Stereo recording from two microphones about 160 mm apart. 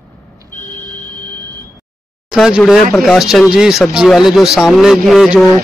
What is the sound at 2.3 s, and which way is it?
Speech, 5° right (ahead or behind).